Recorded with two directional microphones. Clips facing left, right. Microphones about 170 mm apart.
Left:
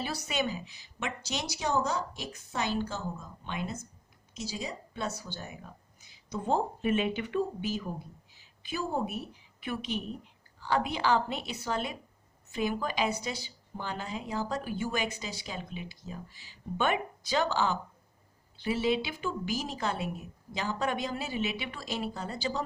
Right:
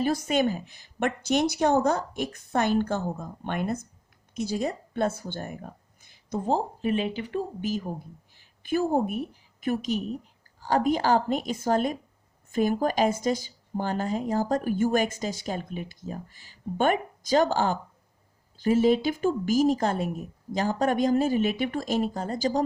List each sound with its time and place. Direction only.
0.0 s a woman's voice: 50° right (ahead or behind)
6.4 s speech: 35° right (ahead or behind)